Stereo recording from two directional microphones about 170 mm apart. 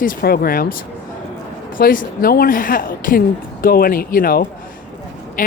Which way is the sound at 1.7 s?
55° left (ahead or behind).